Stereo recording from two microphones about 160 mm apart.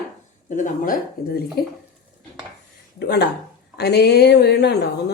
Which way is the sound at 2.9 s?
90° left.